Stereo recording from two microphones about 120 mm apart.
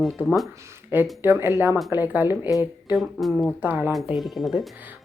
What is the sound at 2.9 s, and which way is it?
Speech, centre (ahead or behind).